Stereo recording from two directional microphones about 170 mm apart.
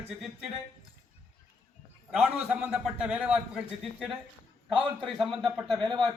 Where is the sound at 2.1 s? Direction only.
5° right (ahead or behind).